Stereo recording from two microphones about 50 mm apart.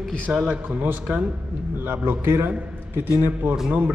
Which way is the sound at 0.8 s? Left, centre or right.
Right.